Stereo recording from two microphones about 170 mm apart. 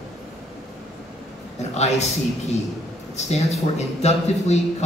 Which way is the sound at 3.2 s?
40° left (ahead or behind).